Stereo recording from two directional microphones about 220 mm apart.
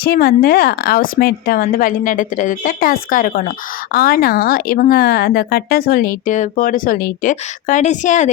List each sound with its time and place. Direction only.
0.0 s speech: 45° left (ahead or behind)